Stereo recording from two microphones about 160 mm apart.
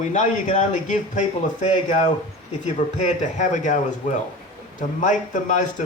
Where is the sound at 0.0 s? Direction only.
50° left (ahead or behind).